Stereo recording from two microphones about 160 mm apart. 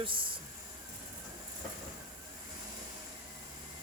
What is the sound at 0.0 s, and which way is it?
Speech, 30° right (ahead or behind).